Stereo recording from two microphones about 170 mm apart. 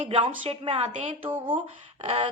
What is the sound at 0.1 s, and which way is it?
A woman's voice, 35° right (ahead or behind).